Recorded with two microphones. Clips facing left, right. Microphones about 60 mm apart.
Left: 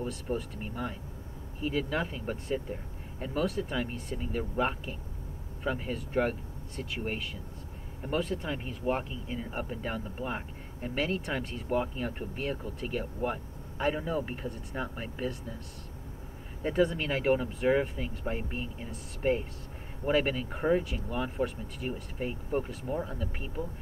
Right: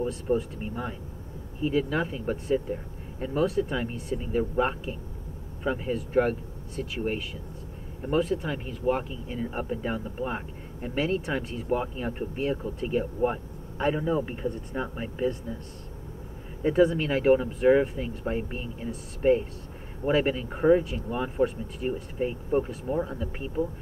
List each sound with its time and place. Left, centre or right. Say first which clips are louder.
0.0 s speech: right 7 dB; centre
8.5 s speech: right 4 dB; centre
9.3 s speech: right 5 dB; centre
16.6 s speech: right 6 dB; centre